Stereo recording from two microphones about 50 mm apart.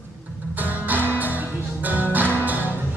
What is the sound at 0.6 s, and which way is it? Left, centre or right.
Music, right.